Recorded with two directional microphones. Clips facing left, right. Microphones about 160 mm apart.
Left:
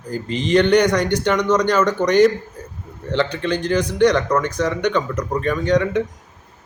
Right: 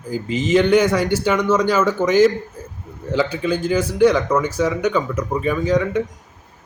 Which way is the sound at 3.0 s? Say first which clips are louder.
Right 1 dB; 5° right (ahead or behind).